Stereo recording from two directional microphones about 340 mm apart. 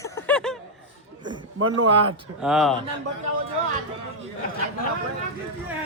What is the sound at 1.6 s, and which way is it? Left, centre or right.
Speech, right.